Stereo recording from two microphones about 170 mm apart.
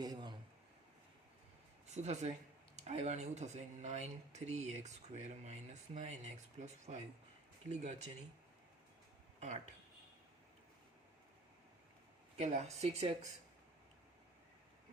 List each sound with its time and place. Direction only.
0.0 s a sound: 25° right (ahead or behind)
1.9 s speech: 40° right (ahead or behind)
12.4 s speech: 40° right (ahead or behind)